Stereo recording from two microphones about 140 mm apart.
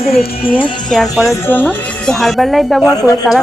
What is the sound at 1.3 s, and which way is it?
Speech, 15° left (ahead or behind).